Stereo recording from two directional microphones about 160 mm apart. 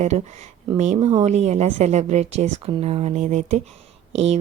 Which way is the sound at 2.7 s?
35° right (ahead or behind).